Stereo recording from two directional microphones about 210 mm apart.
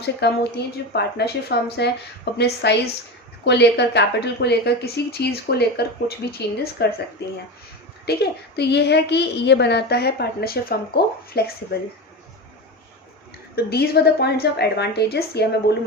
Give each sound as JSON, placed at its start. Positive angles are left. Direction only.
{"t": 0.2, "sound": "a woman's voice", "side_deg": 55}
{"t": 13.6, "sound": "a woman's voice", "side_deg": 50}